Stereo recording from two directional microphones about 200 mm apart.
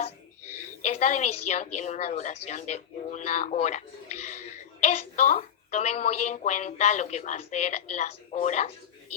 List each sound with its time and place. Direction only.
0.0 s a woman's voice: 35° left (ahead or behind)